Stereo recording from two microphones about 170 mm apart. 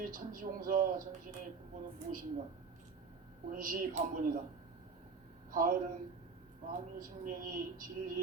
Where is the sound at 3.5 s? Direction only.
55° right (ahead or behind).